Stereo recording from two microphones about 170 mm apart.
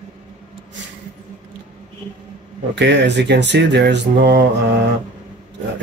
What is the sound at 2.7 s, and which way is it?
Speech, 90° right.